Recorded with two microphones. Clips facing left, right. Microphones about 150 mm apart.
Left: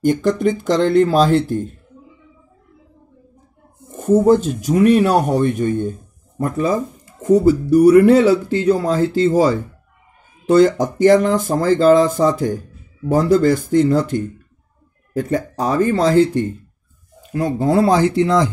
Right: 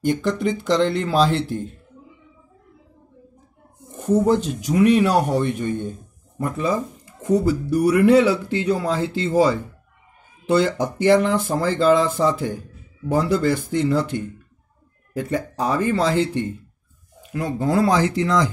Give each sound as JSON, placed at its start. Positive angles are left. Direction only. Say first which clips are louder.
{"t": 0.0, "sound": "speech", "louder": "left 5 dB", "side_deg": 45}
{"t": 4.3, "sound": "speech", "louder": "left 6 dB", "side_deg": 45}